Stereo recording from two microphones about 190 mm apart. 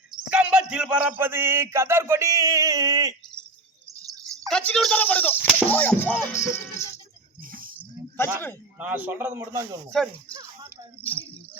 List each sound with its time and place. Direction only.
0.1 s speech: 5° right (ahead or behind)
4.0 s a sound: 20° right (ahead or behind)
4.4 s chop: 5° left (ahead or behind)
8.8 s speech: 10° right (ahead or behind)
9.9 s speech: 5° left (ahead or behind)
11.0 s a sound: 10° left (ahead or behind)